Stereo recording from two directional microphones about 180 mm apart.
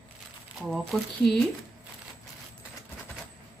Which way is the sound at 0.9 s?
Centre (ahead or behind).